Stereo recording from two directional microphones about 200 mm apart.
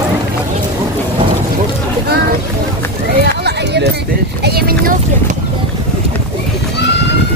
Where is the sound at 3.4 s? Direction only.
55° right (ahead or behind).